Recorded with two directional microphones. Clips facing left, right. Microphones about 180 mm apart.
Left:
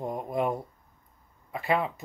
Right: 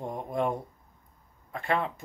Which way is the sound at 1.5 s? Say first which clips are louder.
Left 2 dB; 5° left (ahead or behind).